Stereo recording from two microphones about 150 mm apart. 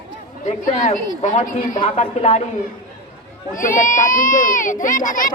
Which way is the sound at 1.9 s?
45° left (ahead or behind).